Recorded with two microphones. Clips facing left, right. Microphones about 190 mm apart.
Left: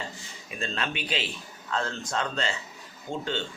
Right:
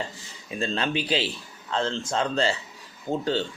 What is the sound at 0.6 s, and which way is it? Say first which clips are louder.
A man's voice: right 6 dB; 30° right (ahead or behind).